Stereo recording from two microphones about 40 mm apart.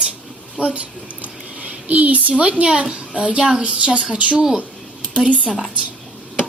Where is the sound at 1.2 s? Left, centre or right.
Right.